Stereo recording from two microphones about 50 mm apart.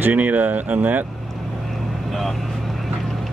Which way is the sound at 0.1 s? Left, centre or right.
Right.